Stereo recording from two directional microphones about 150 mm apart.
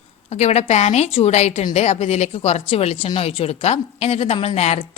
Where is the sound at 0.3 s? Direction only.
45° left (ahead or behind).